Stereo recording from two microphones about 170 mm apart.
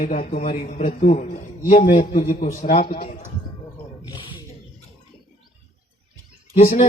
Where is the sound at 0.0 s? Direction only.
50° left (ahead or behind).